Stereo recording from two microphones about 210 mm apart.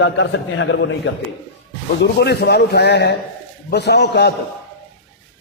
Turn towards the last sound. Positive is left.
turn(degrees=50)  # may be behind; listen again after turning